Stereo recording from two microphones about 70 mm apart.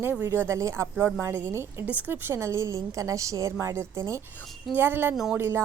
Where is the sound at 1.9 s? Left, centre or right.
Right.